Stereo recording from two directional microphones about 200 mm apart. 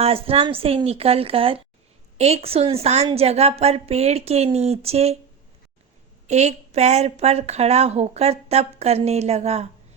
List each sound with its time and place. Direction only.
0.0 s a woman's voice: 30° right (ahead or behind)
6.2 s speech: 35° right (ahead or behind)